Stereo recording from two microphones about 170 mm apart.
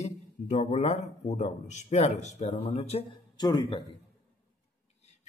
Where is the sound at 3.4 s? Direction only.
25° left (ahead or behind).